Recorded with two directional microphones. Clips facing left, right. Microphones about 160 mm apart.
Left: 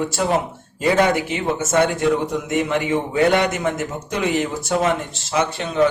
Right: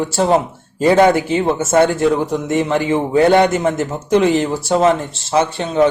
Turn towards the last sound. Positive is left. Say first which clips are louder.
# right 5 dB
turn(degrees=-30)  # may be behind; listen again after turning